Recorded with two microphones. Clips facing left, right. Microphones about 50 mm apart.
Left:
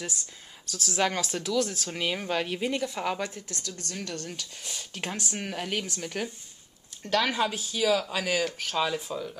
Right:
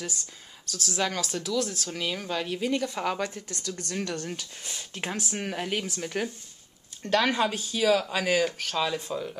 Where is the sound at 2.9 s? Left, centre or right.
Centre.